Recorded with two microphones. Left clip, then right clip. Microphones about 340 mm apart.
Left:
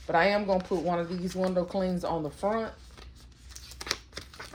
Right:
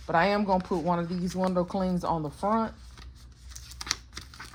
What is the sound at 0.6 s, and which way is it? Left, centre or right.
Speech, centre.